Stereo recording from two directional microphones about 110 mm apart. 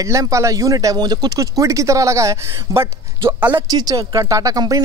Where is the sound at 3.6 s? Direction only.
35° right (ahead or behind).